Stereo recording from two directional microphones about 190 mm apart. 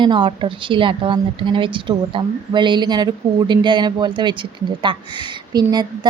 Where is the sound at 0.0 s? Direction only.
25° right (ahead or behind).